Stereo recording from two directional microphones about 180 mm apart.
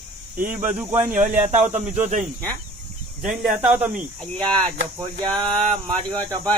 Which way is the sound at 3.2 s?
5° right (ahead or behind).